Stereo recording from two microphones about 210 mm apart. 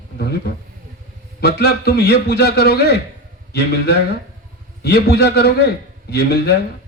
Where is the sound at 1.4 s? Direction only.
50° left (ahead or behind).